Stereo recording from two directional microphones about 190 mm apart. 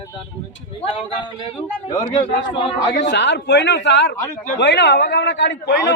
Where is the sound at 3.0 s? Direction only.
65° left (ahead or behind).